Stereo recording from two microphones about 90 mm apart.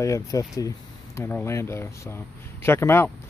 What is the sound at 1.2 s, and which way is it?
Speech, 25° left (ahead or behind).